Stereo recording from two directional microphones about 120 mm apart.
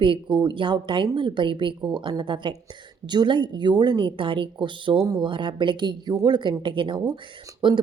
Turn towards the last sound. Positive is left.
turn(degrees=-45)  # may be behind; listen again after turning